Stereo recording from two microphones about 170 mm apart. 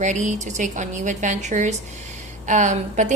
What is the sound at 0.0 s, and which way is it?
A woman's voice, 45° right (ahead or behind).